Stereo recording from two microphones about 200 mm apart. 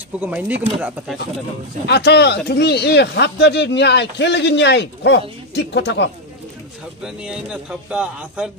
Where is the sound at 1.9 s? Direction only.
55° left (ahead or behind).